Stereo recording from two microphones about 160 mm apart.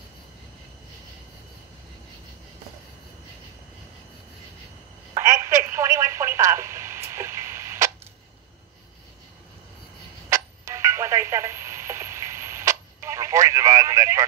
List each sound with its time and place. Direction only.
5.1 s telephone: 20° right (ahead or behind)
10.3 s telephone: 20° right (ahead or behind)